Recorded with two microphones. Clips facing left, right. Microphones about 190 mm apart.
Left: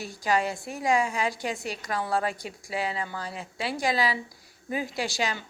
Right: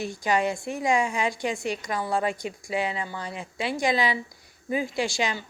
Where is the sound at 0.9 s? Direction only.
35° left (ahead or behind).